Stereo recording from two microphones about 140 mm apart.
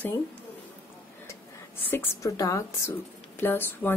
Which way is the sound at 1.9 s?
25° left (ahead or behind).